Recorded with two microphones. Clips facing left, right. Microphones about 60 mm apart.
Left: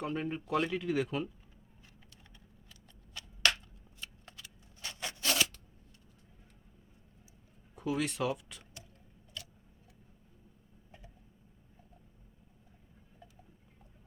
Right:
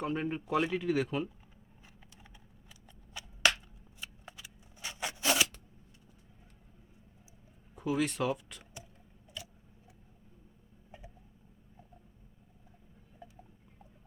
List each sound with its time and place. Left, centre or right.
0.0 s speech: centre
3.2 s a sound: centre
4.0 s shuffling cards: centre
7.8 s speech: centre
9.4 s tick-tock: centre